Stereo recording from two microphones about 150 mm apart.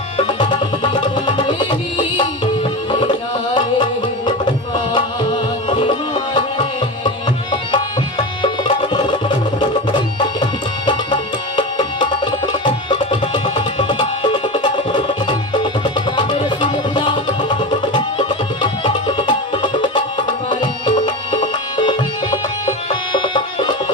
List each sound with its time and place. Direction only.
0.2 s music: 30° left (ahead or behind)
5.6 s music: 30° left (ahead or behind)
8.4 s music: 30° left (ahead or behind)
10.4 s music: 30° left (ahead or behind)
21.3 s music: 30° left (ahead or behind)